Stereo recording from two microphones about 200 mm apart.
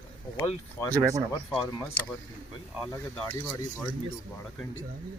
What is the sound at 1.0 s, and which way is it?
Speech, 15° right (ahead or behind).